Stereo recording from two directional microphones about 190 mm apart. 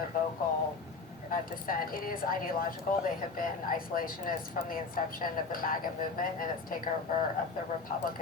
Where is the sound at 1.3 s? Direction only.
50° left (ahead or behind).